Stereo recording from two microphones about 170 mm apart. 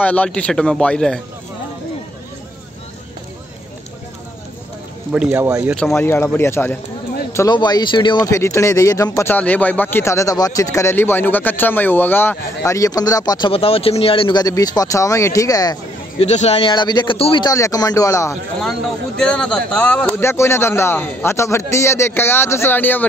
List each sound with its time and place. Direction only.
0.0 s speech: 10° left (ahead or behind)
5.1 s speech: 10° right (ahead or behind)
5.9 s speech: 15° left (ahead or behind)
7.3 s speech: 25° left (ahead or behind)
16.2 s speech: 40° left (ahead or behind); by 18.4 s 20° left (ahead or behind)
18.6 s speech: centre (ahead or behind)